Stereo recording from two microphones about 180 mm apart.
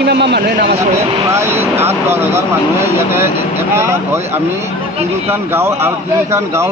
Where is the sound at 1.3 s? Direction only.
15° right (ahead or behind).